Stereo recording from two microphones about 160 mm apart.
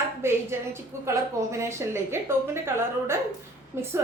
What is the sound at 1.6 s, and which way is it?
A woman's voice, 15° right (ahead or behind).